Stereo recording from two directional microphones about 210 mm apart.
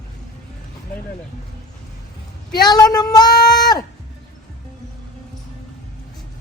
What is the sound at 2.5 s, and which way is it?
Speech, 20° left (ahead or behind).